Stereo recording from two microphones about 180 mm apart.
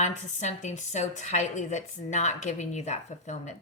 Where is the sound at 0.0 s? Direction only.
40° left (ahead or behind).